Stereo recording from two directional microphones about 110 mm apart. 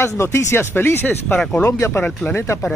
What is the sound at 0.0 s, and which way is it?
Speech, 25° left (ahead or behind).